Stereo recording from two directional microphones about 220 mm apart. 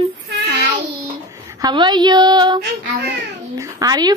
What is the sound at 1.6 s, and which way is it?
A woman's voice, 20° right (ahead or behind).